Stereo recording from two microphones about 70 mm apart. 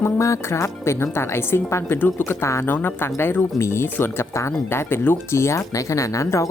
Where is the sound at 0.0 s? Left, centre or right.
Left.